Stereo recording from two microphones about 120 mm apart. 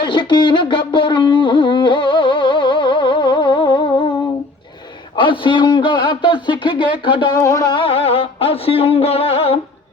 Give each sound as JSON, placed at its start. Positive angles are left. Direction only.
{"t": 0.0, "sound": "music", "side_deg": 40}
{"t": 5.1, "sound": "a man's voice", "side_deg": 45}
{"t": 7.3, "sound": "speech", "side_deg": 25}
{"t": 7.7, "sound": "music", "side_deg": 50}